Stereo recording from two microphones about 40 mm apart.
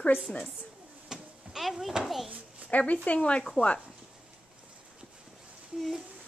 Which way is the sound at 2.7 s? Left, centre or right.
Left.